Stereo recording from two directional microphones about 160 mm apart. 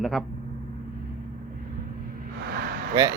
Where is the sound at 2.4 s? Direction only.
85° right.